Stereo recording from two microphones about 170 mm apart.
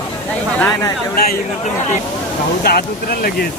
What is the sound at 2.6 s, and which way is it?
Speech, 65° left (ahead or behind).